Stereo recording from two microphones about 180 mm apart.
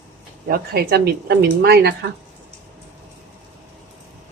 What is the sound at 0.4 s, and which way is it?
Speech, 55° right (ahead or behind).